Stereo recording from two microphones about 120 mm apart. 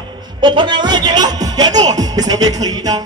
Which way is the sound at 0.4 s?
40° right (ahead or behind).